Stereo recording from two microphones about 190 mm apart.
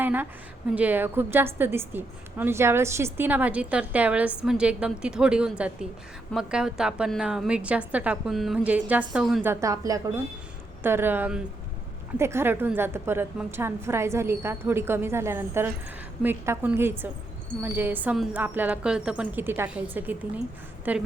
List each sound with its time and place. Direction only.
0.0 s a woman's voice: 10° right (ahead or behind)
9.5 s a woman's voice: 15° right (ahead or behind)